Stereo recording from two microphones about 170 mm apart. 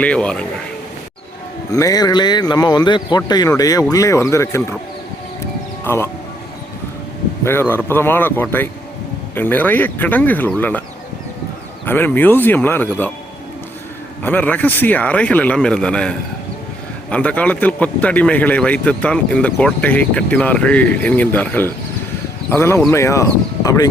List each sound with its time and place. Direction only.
0.0 s a man's voice: 5° left (ahead or behind)
1.7 s a man's voice: 20° left (ahead or behind)
5.8 s speech: 15° left (ahead or behind)
7.4 s a man's voice: 15° left (ahead or behind)
11.9 s a man's voice: 10° left (ahead or behind)
14.2 s a man's voice: 10° left (ahead or behind)